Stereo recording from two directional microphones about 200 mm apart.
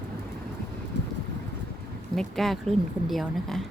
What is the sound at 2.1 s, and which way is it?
Speech, centre (ahead or behind).